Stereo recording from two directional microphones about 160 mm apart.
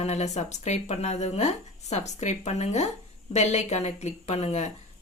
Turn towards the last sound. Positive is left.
turn(degrees=45)  # may be behind; listen again after turning